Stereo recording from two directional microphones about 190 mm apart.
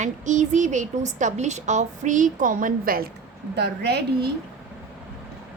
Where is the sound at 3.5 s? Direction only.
60° right (ahead or behind).